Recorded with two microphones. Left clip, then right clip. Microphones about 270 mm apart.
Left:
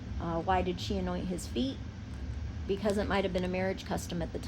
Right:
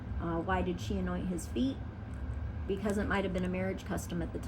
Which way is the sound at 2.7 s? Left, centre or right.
Left.